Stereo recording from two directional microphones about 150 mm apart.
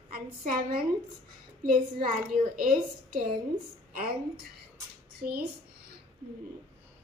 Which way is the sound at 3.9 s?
85° right.